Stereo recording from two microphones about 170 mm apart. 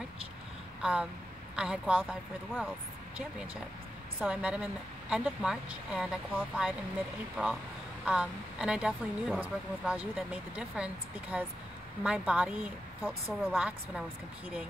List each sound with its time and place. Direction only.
1.6 s speech: 5° right (ahead or behind)
4.2 s a woman's voice: 5° right (ahead or behind)
8.0 s a woman's voice: 5° right (ahead or behind)